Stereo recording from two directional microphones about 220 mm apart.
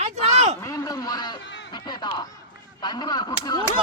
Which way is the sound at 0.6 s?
15° left (ahead or behind).